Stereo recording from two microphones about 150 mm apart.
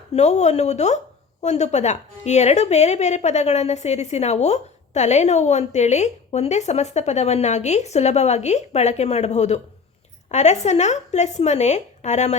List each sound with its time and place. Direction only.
0.1 s a woman's voice: 50° left (ahead or behind)